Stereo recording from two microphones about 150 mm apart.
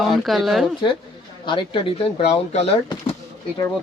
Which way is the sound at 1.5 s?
35° left (ahead or behind).